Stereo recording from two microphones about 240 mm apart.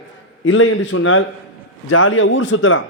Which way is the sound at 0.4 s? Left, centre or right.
Left.